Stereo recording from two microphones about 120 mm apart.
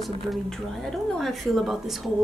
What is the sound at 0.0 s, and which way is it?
A woman's voice, centre (ahead or behind).